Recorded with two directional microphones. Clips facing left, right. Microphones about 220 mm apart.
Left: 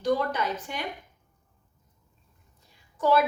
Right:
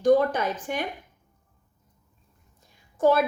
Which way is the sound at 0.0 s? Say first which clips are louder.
Right 6 dB; 50° right (ahead or behind).